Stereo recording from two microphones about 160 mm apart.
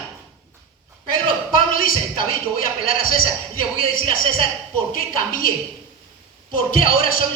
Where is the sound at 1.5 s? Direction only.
60° left (ahead or behind).